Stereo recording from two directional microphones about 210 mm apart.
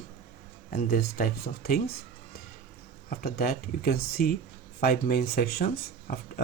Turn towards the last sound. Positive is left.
turn(degrees=45)  # may be behind; listen again after turning